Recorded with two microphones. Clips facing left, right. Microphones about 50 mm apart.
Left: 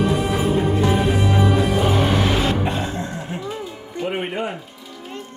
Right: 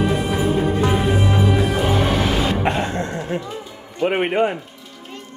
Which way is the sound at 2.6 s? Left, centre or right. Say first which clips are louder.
Right 3 dB; right.